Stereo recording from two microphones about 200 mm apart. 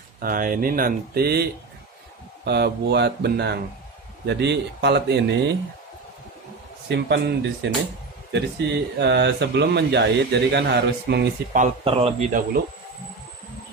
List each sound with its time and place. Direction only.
0.2 s speech: 45° right (ahead or behind)
6.8 s speech: 60° right (ahead or behind)
11.5 s a man's voice: 35° right (ahead or behind)